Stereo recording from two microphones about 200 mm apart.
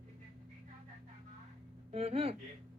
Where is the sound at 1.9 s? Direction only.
30° right (ahead or behind).